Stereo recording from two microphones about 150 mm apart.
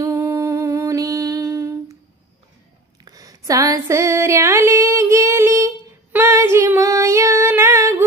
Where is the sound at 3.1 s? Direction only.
25° right (ahead or behind).